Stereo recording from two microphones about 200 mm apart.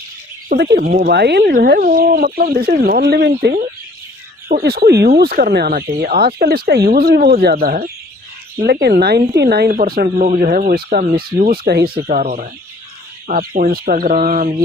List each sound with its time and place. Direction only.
0.4 s speech: 50° right (ahead or behind)
12.0 s speech: 35° right (ahead or behind)